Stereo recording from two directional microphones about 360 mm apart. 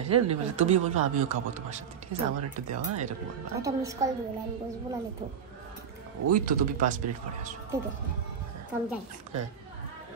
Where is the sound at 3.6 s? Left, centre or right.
Centre.